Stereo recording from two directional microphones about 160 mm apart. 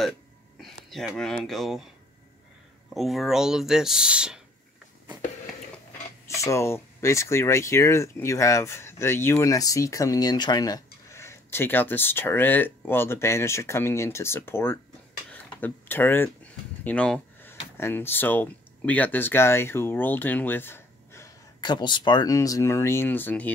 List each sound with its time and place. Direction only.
0.6 s speech: centre (ahead or behind)
2.9 s speech: centre (ahead or behind)
6.2 s speech: 20° left (ahead or behind)
21.5 s speech: 25° left (ahead or behind); by 23.5 s 10° left (ahead or behind)